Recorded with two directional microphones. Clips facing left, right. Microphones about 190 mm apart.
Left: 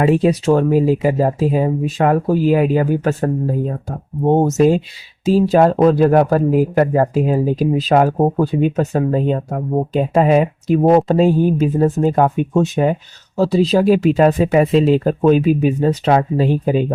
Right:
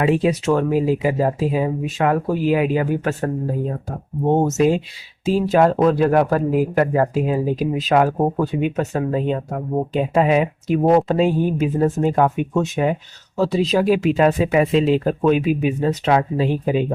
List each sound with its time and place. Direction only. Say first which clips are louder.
0.0 s speech: left 3 dB; 35° left (ahead or behind)
4.3 s speech: left 3 dB; 35° left (ahead or behind)